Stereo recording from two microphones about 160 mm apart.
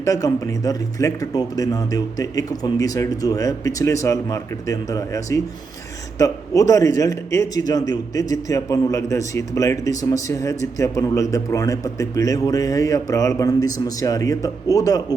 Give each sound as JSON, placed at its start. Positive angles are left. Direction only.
{"t": 0.0, "sound": "a man's voice", "side_deg": 20}